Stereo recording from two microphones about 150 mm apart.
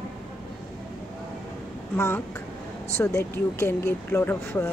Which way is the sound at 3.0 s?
15° left (ahead or behind).